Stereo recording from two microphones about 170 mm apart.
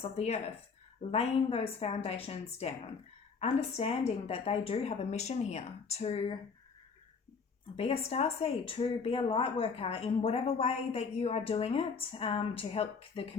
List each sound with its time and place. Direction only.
0.0 s a woman's voice: 40° left (ahead or behind)
7.8 s a woman's voice: 35° left (ahead or behind)